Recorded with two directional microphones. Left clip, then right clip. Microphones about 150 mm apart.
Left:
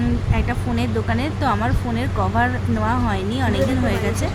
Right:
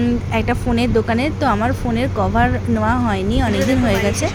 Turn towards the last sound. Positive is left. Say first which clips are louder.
# right 5 dB
turn(degrees=-25)  # may be behind; listen again after turning